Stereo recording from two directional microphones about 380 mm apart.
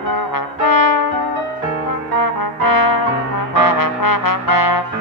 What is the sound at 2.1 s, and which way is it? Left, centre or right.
Brass instrument, left.